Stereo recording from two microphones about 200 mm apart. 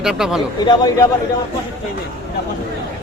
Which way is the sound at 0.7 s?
20° left (ahead or behind).